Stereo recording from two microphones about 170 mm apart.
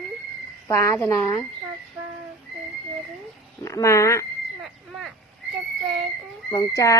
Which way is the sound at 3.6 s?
20° left (ahead or behind).